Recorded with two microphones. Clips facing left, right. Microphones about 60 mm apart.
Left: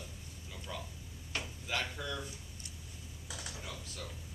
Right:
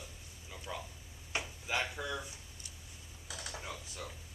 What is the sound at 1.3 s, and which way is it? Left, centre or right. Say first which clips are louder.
Drawer open or close: right 2 dB; centre.